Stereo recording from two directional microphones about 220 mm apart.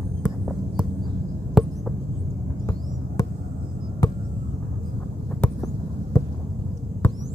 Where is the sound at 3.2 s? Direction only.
15° left (ahead or behind).